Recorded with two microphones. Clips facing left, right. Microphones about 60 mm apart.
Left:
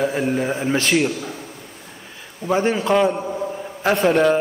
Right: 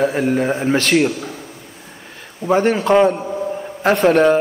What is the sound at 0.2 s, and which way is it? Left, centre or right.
Speech, right.